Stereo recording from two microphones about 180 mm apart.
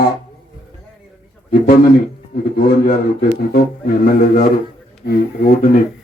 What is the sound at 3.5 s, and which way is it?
A man's voice, 55° left (ahead or behind).